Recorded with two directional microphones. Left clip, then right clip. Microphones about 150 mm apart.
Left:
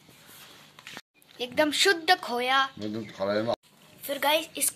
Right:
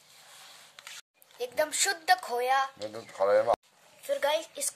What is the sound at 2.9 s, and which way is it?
Speech, 90° right.